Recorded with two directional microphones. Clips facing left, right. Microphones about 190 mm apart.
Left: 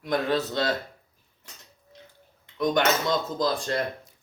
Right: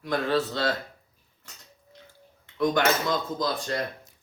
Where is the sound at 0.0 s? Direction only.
20° left (ahead or behind).